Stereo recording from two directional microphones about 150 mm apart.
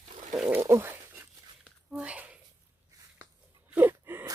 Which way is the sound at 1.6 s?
5° right (ahead or behind).